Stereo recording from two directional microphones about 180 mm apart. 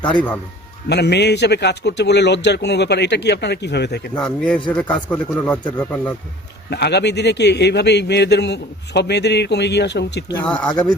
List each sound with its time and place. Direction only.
0.9 s a man's voice: 70° left (ahead or behind)
4.1 s a man's voice: 5° left (ahead or behind)
6.7 s a man's voice: 65° left (ahead or behind)
10.4 s speech: 5° left (ahead or behind)